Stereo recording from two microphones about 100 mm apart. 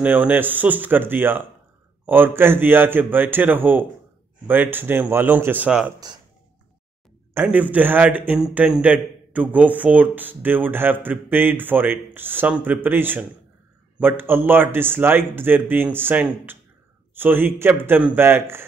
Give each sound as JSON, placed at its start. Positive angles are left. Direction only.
{"t": 0.0, "sound": "speech", "side_deg": -15}
{"t": 7.4, "sound": "speech", "side_deg": -15}